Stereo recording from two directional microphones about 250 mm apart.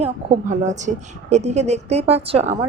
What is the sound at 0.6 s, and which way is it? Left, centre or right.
A woman's voice, right.